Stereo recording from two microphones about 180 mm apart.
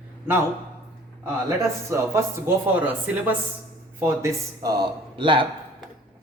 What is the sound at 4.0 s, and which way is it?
Speech, 15° right (ahead or behind).